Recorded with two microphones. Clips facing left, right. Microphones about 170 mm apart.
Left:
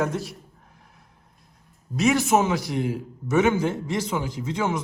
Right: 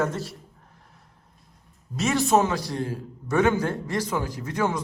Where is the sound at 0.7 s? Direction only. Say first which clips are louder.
Left 1 dB; centre (ahead or behind).